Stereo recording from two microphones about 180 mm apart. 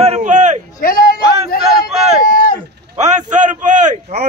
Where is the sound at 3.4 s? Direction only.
45° right (ahead or behind).